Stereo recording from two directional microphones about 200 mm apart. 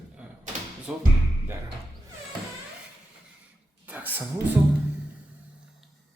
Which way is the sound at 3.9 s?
10° right (ahead or behind).